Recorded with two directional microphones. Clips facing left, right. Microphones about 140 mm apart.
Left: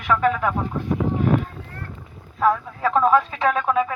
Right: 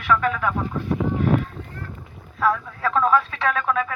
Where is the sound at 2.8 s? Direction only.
40° left (ahead or behind).